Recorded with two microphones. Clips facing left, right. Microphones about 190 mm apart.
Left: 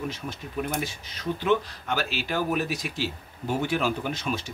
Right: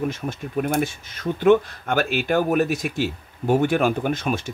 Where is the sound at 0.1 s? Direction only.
50° right (ahead or behind).